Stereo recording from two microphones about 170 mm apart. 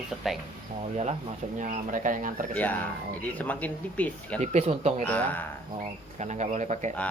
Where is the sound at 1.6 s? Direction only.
50° right (ahead or behind).